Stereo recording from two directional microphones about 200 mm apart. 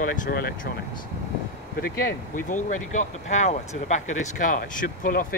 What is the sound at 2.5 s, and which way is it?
Speech, 40° left (ahead or behind).